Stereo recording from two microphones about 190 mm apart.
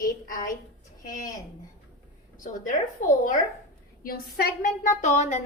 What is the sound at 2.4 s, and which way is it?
A woman's voice, 45° left (ahead or behind).